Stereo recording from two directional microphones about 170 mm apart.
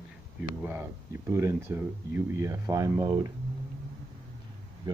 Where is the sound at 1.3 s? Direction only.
15° right (ahead or behind).